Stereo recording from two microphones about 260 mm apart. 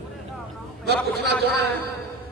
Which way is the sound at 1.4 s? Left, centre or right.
Right.